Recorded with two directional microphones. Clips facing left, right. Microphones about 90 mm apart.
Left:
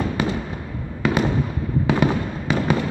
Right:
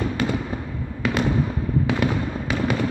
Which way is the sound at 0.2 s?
5° left (ahead or behind).